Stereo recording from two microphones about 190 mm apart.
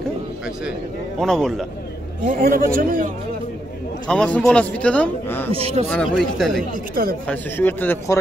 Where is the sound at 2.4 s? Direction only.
50° right (ahead or behind).